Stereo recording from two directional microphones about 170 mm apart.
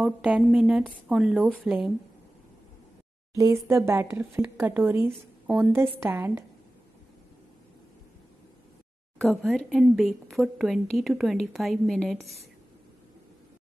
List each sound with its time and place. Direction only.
0.0 s a woman's voice: 5° right (ahead or behind)
3.3 s speech: 15° right (ahead or behind)
9.2 s a woman's voice: centre (ahead or behind)